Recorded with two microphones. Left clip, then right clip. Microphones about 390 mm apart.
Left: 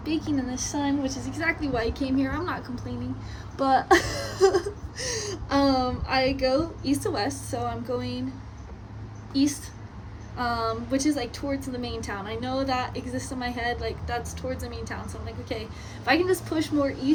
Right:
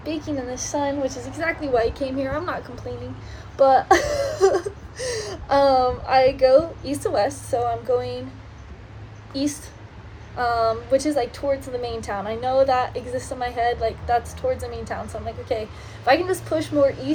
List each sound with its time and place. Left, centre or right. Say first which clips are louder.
0.5 s speech: right 4 dB; centre
1.0 s a woman's voice: right 5 dB; centre
1.4 s speech: right 6 dB; centre
3.6 s speech: right 5 dB; centre
9.3 s a woman's voice: even; centre
16.0 s speech: right 4 dB; centre